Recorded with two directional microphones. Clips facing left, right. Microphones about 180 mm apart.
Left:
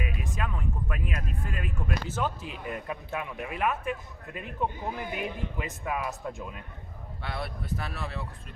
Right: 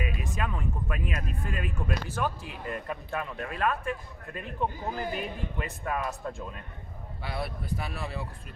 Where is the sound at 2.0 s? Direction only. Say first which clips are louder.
Even; 20° left (ahead or behind).